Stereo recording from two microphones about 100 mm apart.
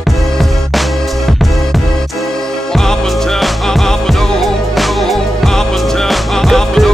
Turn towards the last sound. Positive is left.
turn(degrees=5)  # may be behind; listen again after turning